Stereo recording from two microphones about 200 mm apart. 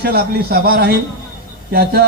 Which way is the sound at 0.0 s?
50° right (ahead or behind).